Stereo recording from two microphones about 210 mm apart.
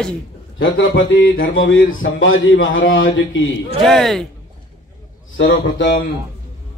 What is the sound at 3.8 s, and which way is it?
Speech, centre (ahead or behind).